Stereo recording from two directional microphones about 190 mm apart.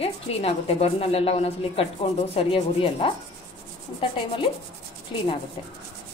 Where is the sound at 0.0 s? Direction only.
30° left (ahead or behind).